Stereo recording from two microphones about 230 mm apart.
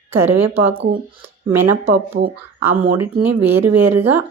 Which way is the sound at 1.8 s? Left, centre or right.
Right.